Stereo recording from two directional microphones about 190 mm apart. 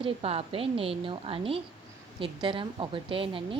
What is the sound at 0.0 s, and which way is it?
A woman's voice, 30° right (ahead or behind).